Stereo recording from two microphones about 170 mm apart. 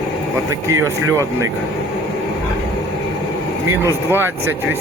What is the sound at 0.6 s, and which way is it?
Speech, 15° right (ahead or behind).